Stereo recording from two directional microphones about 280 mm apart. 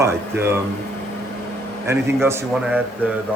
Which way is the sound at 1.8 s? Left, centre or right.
Centre.